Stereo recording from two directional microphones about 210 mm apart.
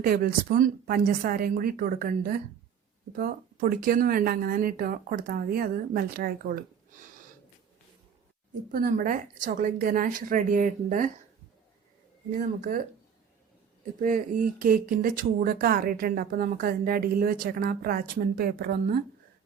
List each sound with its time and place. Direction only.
0.0 s speech: 45° right (ahead or behind)
8.7 s speech: 40° right (ahead or behind)
12.4 s speech: 40° right (ahead or behind)
14.0 s speech: 40° right (ahead or behind)